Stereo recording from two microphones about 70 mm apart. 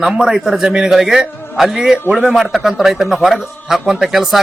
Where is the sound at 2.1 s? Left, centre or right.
Centre.